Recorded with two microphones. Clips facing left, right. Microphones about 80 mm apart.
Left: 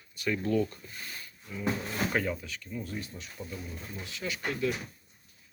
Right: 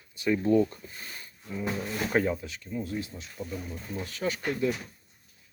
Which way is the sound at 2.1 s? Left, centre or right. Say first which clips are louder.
Right 4 dB; right.